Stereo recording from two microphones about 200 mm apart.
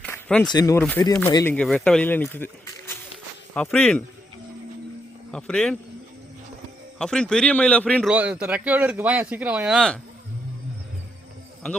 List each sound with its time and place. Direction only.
0.0 s a sound: 5° left (ahead or behind)
0.4 s speech: 20° left (ahead or behind)
1.5 s speech: 5° left (ahead or behind)
5.3 s speech: 5° left (ahead or behind)
7.0 s speech: 5° left (ahead or behind)
8.1 s speech: 5° right (ahead or behind)